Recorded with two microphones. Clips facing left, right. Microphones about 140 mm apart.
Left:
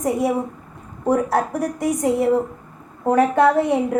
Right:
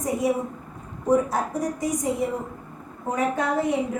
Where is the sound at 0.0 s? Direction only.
65° left (ahead or behind).